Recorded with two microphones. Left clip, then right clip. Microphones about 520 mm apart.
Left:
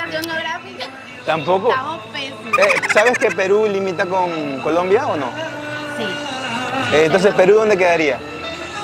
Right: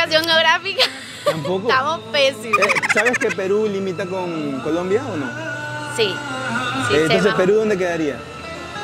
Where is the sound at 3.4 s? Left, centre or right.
Left.